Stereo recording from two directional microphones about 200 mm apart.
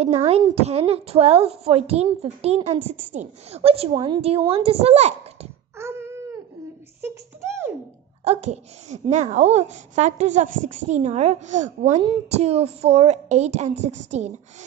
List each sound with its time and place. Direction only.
0.6 s a woman's voice: 30° right (ahead or behind)
5.8 s a sound: 10° right (ahead or behind)
8.2 s a woman's voice: 35° right (ahead or behind)